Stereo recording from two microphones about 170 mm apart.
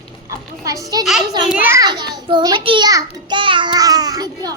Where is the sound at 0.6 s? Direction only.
20° right (ahead or behind).